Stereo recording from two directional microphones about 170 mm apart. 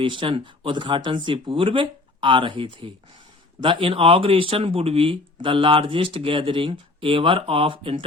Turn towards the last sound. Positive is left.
turn(degrees=-30)  # may be behind; listen again after turning